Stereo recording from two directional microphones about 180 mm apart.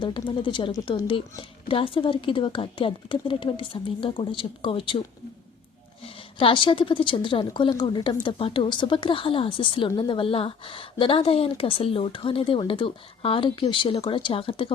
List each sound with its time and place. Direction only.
0.0 s a woman's voice: 25° left (ahead or behind)
6.4 s a woman's voice: 30° left (ahead or behind)